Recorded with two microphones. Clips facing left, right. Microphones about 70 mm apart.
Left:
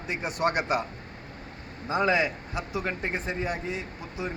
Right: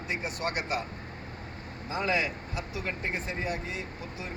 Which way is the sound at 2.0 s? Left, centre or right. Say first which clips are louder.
Left 2 dB; left.